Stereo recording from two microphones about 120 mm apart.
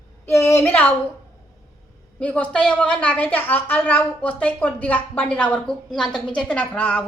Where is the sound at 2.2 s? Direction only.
10° left (ahead or behind).